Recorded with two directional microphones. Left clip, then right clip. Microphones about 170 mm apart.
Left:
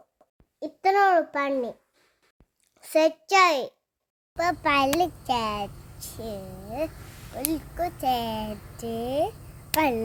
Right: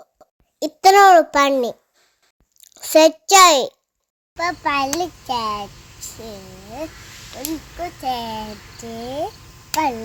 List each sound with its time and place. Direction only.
0.6 s a sound: 30° right (ahead or behind)
1.0 s a child's voice: 25° right (ahead or behind)
2.6 s a sound: 35° right (ahead or behind)
4.4 s a child's voice: 30° left (ahead or behind)
6.1 s speech: 5° left (ahead or behind)
7.8 s a child's voice: 30° left (ahead or behind)
9.7 s a child's voice: 40° left (ahead or behind)